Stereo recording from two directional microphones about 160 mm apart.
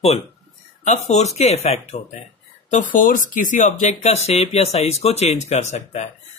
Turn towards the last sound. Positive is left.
turn(degrees=45)  # may be behind; listen again after turning